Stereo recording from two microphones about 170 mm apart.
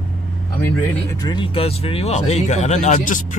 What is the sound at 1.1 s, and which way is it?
Speech, 25° left (ahead or behind).